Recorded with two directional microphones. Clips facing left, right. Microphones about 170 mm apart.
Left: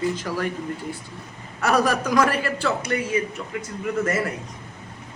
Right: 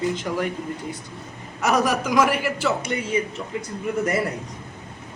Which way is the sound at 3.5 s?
25° right (ahead or behind).